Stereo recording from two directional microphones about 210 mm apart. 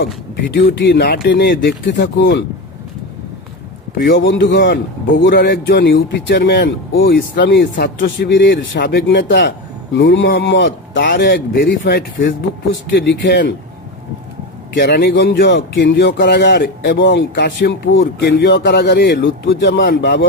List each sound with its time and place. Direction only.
0.5 s a man's voice: 55° left (ahead or behind)
4.2 s a man's voice: 60° left (ahead or behind)
14.7 s a man's voice: 50° left (ahead or behind)